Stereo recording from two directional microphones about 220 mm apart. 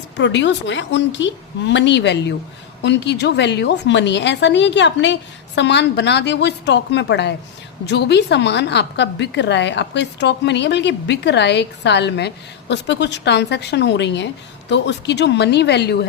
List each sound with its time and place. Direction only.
0.2 s a woman's voice: 55° left (ahead or behind)